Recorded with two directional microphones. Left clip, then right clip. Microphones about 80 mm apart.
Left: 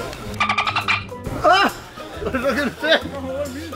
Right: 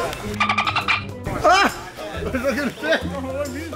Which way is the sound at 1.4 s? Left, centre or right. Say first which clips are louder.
Even; centre.